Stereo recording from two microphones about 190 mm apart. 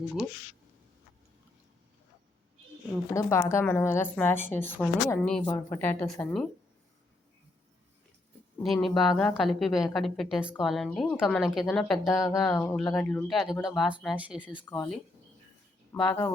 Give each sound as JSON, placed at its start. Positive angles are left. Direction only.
{"t": 3.1, "sound": "a woman's voice", "side_deg": 15}
{"t": 5.5, "sound": "a woman's voice", "side_deg": 15}
{"t": 8.6, "sound": "a woman's voice", "side_deg": 0}
{"t": 12.8, "sound": "speech", "side_deg": 20}
{"t": 13.1, "sound": "a woman's voice", "side_deg": 5}
{"t": 14.6, "sound": "a woman's voice", "side_deg": 10}